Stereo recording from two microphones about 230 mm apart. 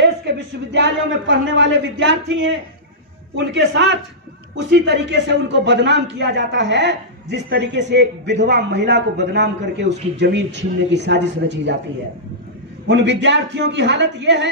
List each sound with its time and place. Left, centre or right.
0.0 s a man's voice: right
12.8 s a man's voice: right